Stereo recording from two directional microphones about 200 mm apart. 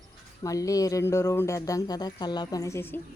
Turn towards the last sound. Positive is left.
turn(degrees=10)  # may be behind; listen again after turning